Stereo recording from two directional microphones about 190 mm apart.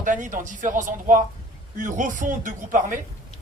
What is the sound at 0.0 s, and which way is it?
Speech, 45° right (ahead or behind).